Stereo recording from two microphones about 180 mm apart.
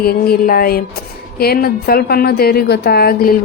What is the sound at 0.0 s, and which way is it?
A woman's voice, 60° left (ahead or behind).